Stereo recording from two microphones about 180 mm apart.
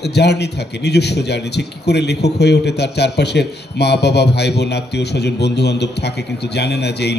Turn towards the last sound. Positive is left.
turn(degrees=70)  # may be behind; listen again after turning